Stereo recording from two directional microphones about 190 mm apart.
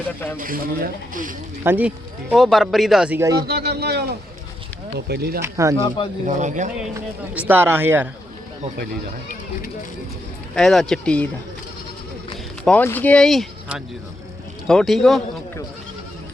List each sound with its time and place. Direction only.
0.3 s speech: 45° right (ahead or behind)
1.6 s speech: 10° right (ahead or behind)
3.2 s speech: 15° right (ahead or behind)
3.4 s a man's voice: 55° right (ahead or behind)
5.4 s speech: 15° right (ahead or behind)
6.2 s a man's voice: 40° right (ahead or behind)
6.9 s speech: 10° right (ahead or behind)
10.5 s speech: centre (ahead or behind)
12.6 s speech: 10° left (ahead or behind)